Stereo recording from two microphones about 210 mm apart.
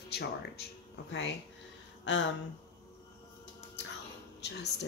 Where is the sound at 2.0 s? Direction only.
60° left (ahead or behind).